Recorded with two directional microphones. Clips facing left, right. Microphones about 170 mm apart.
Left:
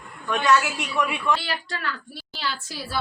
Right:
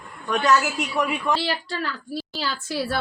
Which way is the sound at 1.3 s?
30° right (ahead or behind).